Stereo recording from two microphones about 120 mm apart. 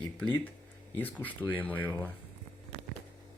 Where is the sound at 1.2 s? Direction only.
15° left (ahead or behind).